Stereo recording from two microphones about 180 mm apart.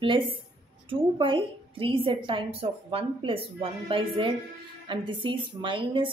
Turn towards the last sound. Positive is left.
turn(degrees=-25)  # may be behind; listen again after turning